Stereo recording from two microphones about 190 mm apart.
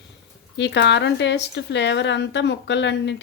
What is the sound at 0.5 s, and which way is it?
A woman's voice, 65° left (ahead or behind).